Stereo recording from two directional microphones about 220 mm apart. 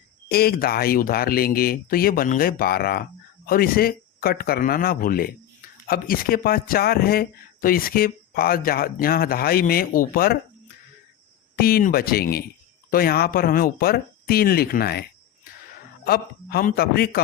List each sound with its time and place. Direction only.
0.3 s speech: 45° left (ahead or behind)
11.5 s speech: 45° left (ahead or behind)
16.0 s speech: 45° left (ahead or behind)